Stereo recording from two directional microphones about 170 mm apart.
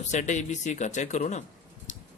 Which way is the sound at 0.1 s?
45° left (ahead or behind).